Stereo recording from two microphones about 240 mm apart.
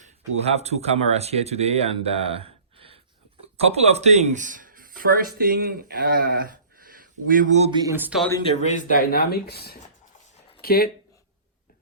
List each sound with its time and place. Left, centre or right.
0.4 s speech: right; by 8.2 s centre
8.4 s speech: left